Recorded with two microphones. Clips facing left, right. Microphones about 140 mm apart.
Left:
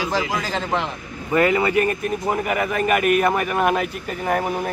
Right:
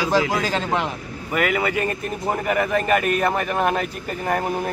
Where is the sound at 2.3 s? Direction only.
10° left (ahead or behind).